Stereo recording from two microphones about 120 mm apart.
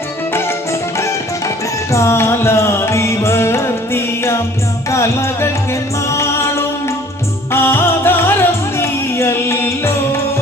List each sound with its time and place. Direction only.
0.3 s music: 20° left (ahead or behind)
7.5 s music: 20° left (ahead or behind)